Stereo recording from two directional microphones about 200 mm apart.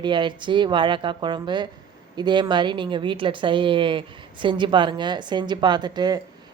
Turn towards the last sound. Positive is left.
turn(degrees=-20)  # may be behind; listen again after turning